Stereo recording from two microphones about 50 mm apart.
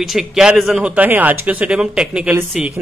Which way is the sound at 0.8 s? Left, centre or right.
Right.